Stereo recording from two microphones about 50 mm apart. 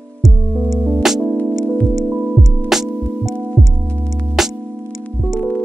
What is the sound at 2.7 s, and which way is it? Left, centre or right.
Music, centre.